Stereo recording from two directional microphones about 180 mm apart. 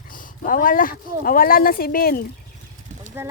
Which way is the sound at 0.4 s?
50° left (ahead or behind).